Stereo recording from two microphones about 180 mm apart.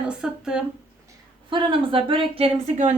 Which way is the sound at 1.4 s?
30° right (ahead or behind).